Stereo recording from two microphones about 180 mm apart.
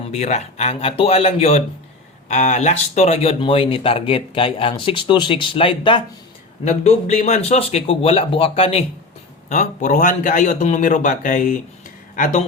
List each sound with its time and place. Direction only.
0.1 s speech: 40° left (ahead or behind)
6.7 s a man's voice: 40° left (ahead or behind)